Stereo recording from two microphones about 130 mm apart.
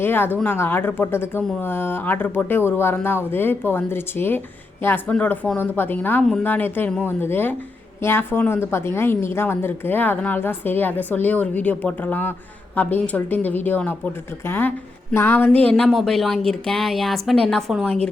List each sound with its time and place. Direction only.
0.0 s speech: 15° left (ahead or behind)
15.7 s a woman's voice: centre (ahead or behind)